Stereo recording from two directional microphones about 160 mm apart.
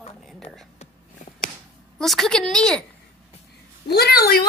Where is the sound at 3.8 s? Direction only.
90° left; by 4.4 s 75° left (ahead or behind).